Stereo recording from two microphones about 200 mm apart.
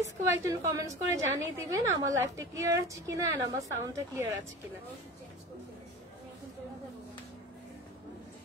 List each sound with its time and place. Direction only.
0.2 s a woman's voice: 15° right (ahead or behind)